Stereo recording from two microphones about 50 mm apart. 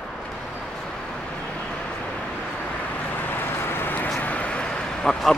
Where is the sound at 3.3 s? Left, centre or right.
Left.